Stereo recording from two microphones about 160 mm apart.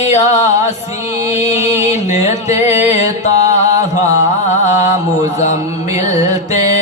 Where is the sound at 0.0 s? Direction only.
45° left (ahead or behind).